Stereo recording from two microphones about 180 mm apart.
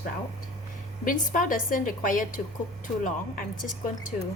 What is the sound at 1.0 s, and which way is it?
A woman's voice, 45° left (ahead or behind).